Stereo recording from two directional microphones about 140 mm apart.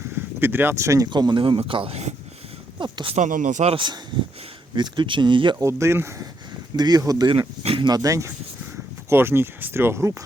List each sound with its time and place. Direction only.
0.3 s speech: 15° right (ahead or behind)
1.1 s speech: 35° right (ahead or behind); by 2.1 s 50° right (ahead or behind)
2.7 s speech: 35° right (ahead or behind)
3.2 s speech: 65° right (ahead or behind)
4.7 s speech: 30° right (ahead or behind)
5.5 s speech: 20° right (ahead or behind)
7.6 s speech: 40° right (ahead or behind); by 10.2 s 20° right (ahead or behind)